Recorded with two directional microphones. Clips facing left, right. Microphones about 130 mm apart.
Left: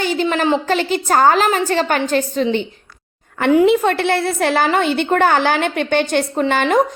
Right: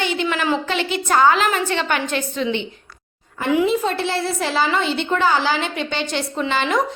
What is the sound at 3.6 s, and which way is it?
A woman's voice, 65° left (ahead or behind).